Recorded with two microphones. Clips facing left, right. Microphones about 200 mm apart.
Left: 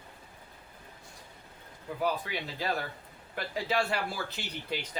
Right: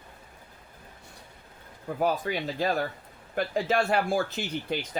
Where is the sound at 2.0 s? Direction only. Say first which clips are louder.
Right 5 dB; 45° right (ahead or behind).